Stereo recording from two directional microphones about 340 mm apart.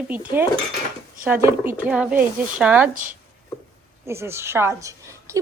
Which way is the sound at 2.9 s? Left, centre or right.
Right.